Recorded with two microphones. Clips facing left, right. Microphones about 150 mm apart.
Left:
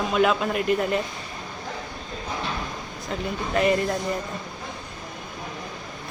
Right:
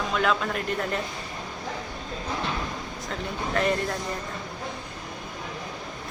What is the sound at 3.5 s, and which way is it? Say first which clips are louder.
Speech: left 4 dB; 10° left (ahead or behind).